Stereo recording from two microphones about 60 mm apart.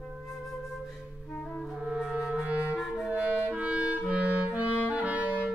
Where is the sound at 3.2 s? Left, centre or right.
Right.